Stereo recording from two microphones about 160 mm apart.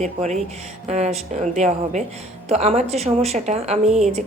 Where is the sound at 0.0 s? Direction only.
45° right (ahead or behind).